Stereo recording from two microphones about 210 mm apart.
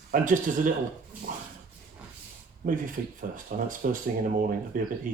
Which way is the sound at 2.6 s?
40° right (ahead or behind).